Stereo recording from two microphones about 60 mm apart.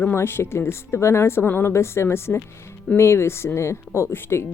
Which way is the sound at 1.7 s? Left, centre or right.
Left.